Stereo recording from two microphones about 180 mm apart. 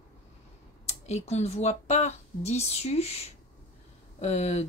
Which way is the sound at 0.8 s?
35° left (ahead or behind).